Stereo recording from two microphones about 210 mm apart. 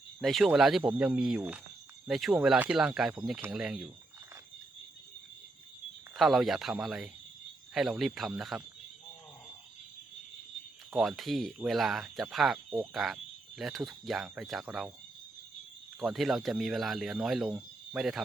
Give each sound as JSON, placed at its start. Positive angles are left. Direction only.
{"t": 0.2, "sound": "speech", "side_deg": 0}
{"t": 6.1, "sound": "speech", "side_deg": 0}
{"t": 10.9, "sound": "speech", "side_deg": 0}
{"t": 16.0, "sound": "speech", "side_deg": 0}